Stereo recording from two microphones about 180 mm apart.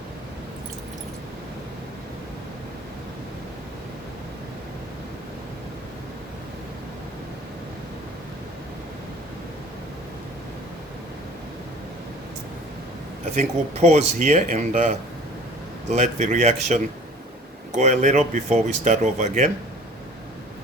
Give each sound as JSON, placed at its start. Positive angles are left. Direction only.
{"t": 13.3, "sound": "speech", "side_deg": -40}